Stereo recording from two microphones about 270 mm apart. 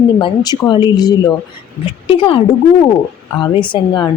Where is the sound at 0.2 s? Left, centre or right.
Centre.